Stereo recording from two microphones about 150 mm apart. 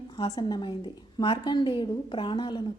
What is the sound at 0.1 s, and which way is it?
A woman's voice, 30° left (ahead or behind).